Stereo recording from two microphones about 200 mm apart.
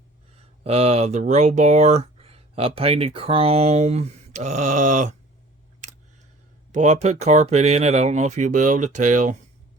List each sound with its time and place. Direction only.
0.3 s speech: 30° right (ahead or behind)
6.7 s speech: 35° right (ahead or behind)